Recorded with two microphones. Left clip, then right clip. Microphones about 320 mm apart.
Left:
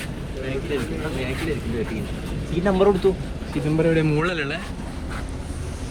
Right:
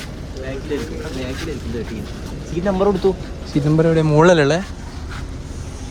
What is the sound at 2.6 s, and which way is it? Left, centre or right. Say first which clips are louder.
Speech: right 1 dB; centre.